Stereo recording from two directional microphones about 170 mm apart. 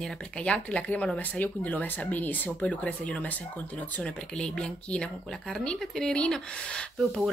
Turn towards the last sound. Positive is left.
turn(degrees=0)  # may be behind; listen again after turning